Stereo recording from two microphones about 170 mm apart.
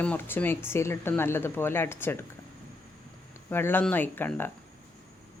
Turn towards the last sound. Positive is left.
turn(degrees=10)  # may be behind; listen again after turning